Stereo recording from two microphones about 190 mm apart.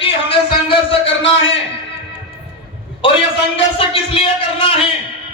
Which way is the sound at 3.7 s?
30° left (ahead or behind).